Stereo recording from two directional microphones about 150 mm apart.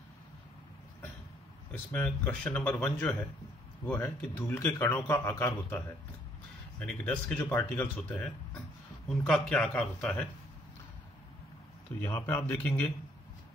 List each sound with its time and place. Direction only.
1.7 s a man's voice: 10° left (ahead or behind)
6.8 s a man's voice: 10° left (ahead or behind)
12.0 s a man's voice: 15° left (ahead or behind)